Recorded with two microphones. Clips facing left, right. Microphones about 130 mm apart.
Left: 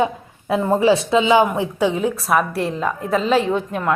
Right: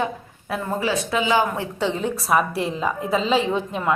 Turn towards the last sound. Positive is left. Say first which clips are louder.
# left 2 dB
turn(degrees=0)  # may be behind; listen again after turning